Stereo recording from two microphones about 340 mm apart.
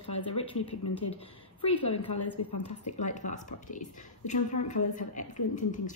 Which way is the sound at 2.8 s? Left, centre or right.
Left.